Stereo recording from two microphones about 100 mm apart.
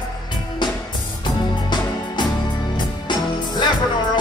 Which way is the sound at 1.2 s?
45° left (ahead or behind).